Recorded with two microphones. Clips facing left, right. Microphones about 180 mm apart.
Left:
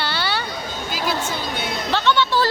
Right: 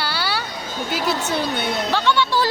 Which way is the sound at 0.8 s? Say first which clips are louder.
Right 2 dB; 65° right (ahead or behind).